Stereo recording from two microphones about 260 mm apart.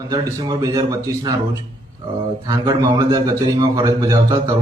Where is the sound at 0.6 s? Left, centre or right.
Centre.